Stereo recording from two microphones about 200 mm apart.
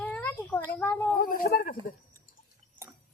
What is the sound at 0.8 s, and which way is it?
Speech, 10° left (ahead or behind).